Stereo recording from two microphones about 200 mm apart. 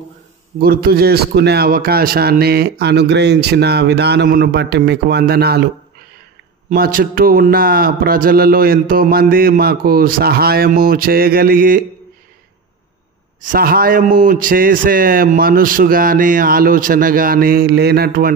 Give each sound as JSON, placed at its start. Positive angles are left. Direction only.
{"t": 0.6, "sound": "a man's voice", "side_deg": -50}
{"t": 6.7, "sound": "a man's voice", "side_deg": -45}
{"t": 13.5, "sound": "a man's voice", "side_deg": -45}